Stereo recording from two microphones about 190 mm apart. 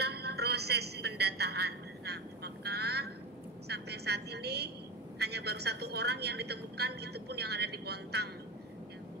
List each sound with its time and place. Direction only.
0.0 s music: 60° right (ahead or behind)
3.6 s a woman's voice: 60° right (ahead or behind)